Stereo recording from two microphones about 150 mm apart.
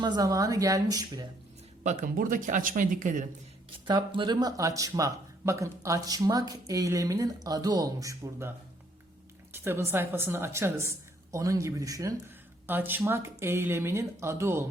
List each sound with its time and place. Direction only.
0.0 s speech: 25° right (ahead or behind)
1.8 s speech: 50° right (ahead or behind)
2.1 s speech: 65° right (ahead or behind)
3.8 s a woman's voice: 30° right (ahead or behind)